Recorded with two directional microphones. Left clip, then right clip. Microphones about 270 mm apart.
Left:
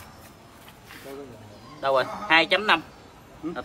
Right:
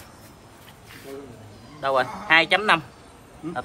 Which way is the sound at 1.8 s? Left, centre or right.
Centre.